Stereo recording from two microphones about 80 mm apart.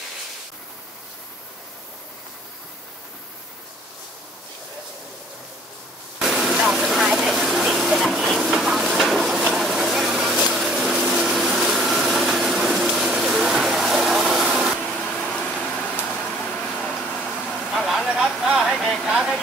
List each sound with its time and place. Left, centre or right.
6.1 s vehicle: centre
14.8 s a sound: centre
15.8 s vehicle: centre
17.5 s vehicle: centre